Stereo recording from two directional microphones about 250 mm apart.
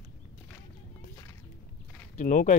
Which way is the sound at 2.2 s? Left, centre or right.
Left.